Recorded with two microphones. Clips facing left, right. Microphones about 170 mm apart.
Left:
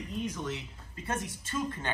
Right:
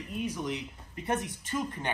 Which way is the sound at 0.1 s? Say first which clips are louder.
Right 2 dB; 10° right (ahead or behind).